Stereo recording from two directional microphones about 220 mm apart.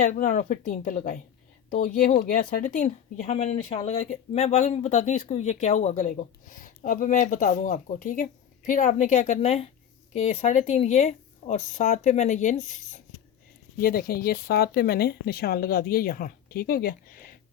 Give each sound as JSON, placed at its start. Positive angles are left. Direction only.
{"t": 0.0, "sound": "speech", "side_deg": 35}